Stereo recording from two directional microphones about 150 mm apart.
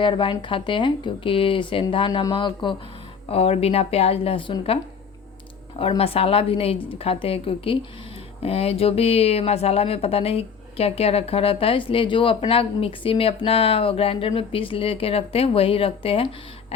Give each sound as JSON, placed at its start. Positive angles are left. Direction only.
{"t": 0.0, "sound": "speech", "side_deg": 35}
{"t": 6.0, "sound": "speech", "side_deg": 40}